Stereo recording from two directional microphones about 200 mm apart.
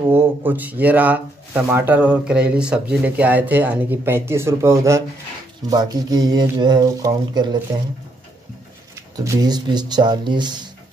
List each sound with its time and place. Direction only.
0.1 s speech: 10° right (ahead or behind)
9.1 s speech: 15° right (ahead or behind)